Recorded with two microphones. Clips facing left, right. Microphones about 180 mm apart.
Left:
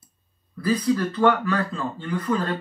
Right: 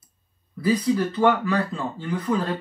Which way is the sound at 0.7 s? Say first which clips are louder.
Right 1 dB; 10° right (ahead or behind).